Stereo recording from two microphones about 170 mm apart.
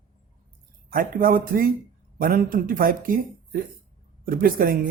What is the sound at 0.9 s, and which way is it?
Speech, 55° right (ahead or behind).